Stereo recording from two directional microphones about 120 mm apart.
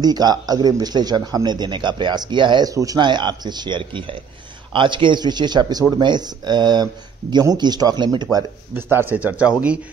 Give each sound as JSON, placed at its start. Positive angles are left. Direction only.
{"t": 0.0, "sound": "a man's voice", "side_deg": -35}
{"t": 2.7, "sound": "a man's voice", "side_deg": -30}
{"t": 8.9, "sound": "speech", "side_deg": -15}